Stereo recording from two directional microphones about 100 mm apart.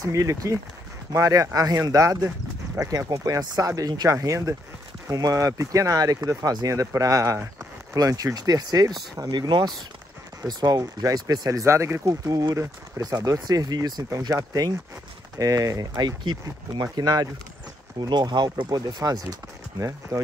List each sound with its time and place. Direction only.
0.0 s speech: 35° right (ahead or behind)